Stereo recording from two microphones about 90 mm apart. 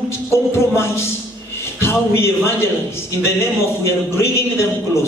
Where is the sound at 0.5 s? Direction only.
30° left (ahead or behind).